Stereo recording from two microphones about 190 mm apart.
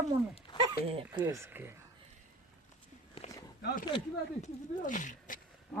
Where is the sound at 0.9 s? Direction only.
30° right (ahead or behind).